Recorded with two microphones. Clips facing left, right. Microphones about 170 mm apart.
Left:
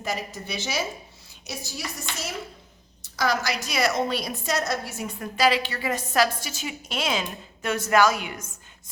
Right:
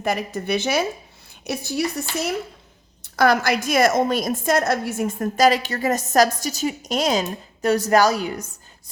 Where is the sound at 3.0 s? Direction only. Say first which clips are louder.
Right 7 dB; 60° right (ahead or behind).